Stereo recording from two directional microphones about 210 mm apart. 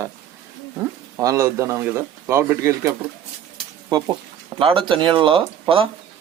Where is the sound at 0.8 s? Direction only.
15° right (ahead or behind).